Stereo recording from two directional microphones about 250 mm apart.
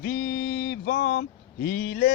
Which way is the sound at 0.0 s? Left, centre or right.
Left.